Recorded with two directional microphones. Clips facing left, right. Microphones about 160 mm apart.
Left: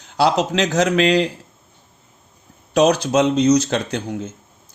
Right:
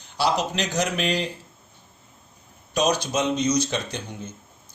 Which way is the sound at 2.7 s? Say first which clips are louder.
Left 8 dB; 80° left.